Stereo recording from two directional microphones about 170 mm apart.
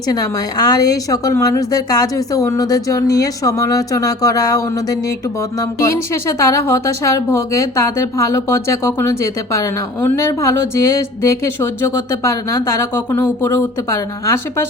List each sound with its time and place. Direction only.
0.1 s a woman's voice: 20° left (ahead or behind)
6.4 s speech: 15° left (ahead or behind)